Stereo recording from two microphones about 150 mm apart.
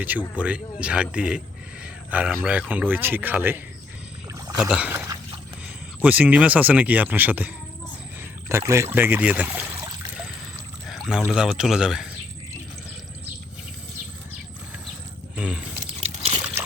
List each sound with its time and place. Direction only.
0.3 s speech: 10° right (ahead or behind)
10.8 s pour: 5° right (ahead or behind)
11.3 s speech: 5° right (ahead or behind)
15.4 s speech: 10° right (ahead or behind)
16.0 s a sound: 45° right (ahead or behind)